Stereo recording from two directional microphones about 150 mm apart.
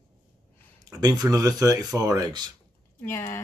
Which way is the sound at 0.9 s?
25° right (ahead or behind).